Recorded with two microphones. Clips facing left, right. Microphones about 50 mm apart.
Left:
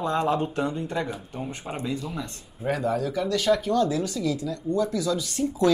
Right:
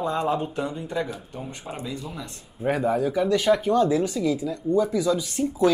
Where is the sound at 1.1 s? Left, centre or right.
Centre.